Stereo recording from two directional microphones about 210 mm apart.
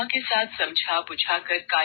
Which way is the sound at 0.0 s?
45° left (ahead or behind).